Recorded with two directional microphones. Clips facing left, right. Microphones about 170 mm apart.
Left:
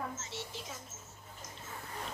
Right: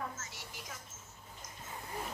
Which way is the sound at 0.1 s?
25° left (ahead or behind).